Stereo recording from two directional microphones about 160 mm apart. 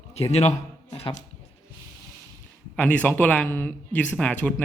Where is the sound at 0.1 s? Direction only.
40° left (ahead or behind).